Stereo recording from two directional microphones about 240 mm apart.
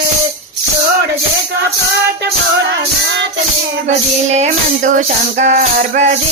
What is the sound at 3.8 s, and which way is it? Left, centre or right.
Music, right.